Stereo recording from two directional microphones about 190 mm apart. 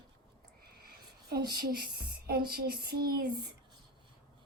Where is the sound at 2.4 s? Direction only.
55° right (ahead or behind).